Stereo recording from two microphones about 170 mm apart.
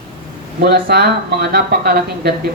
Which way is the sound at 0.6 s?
65° right (ahead or behind).